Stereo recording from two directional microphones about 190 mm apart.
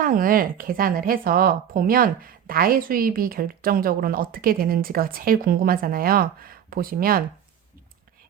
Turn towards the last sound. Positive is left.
turn(degrees=-50)  # may be behind; listen again after turning